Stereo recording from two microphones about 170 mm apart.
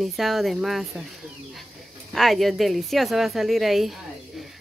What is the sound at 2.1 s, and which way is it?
A woman's voice, centre (ahead or behind).